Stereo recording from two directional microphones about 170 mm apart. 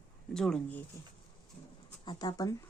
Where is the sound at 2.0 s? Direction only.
25° left (ahead or behind).